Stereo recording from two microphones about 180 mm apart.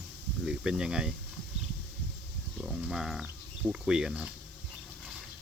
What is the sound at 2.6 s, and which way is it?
Speech, centre (ahead or behind).